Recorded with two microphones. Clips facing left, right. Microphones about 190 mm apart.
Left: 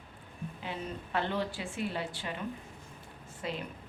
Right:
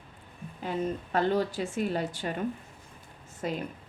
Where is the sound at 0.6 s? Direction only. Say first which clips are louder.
Right 9 dB; 40° right (ahead or behind).